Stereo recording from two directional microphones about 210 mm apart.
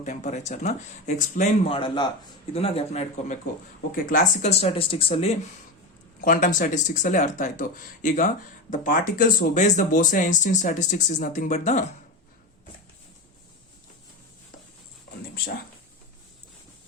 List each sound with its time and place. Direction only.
0.0 s speech: 35° left (ahead or behind)
6.2 s speech: 40° left (ahead or behind)